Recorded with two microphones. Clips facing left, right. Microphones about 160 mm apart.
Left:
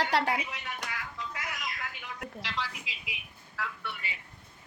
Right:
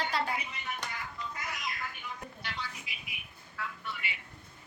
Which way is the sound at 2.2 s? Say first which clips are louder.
Left 8 dB; 90° left.